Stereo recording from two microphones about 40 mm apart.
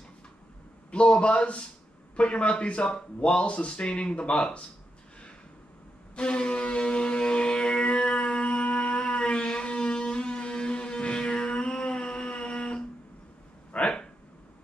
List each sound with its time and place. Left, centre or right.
0.9 s speech: left
6.1 s shofar: left
9.0 s a sound: left